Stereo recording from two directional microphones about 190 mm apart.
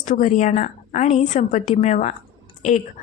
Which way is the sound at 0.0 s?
40° left (ahead or behind).